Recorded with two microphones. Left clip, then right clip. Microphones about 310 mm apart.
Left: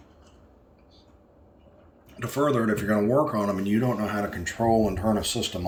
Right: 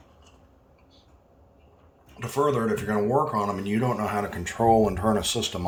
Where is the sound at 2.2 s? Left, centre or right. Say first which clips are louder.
Even; centre.